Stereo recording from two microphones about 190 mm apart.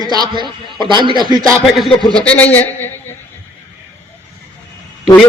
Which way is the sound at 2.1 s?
5° left (ahead or behind).